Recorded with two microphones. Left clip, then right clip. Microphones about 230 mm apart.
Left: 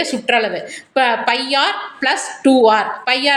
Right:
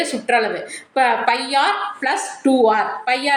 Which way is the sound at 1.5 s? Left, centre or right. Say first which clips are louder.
Even; left.